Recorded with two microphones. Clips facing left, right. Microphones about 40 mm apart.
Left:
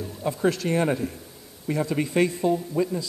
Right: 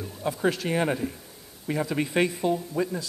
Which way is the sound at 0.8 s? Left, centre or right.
Centre.